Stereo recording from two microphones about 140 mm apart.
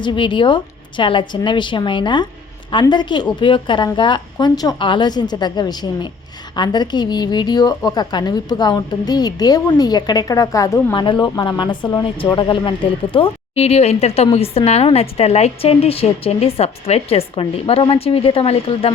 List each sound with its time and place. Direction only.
0.0 s a woman's voice: 35° left (ahead or behind); by 10.9 s 20° left (ahead or behind)
10.9 s a woman's voice: 35° left (ahead or behind)